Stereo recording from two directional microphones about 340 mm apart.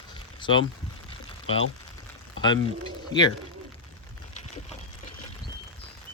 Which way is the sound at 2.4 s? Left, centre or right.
Centre.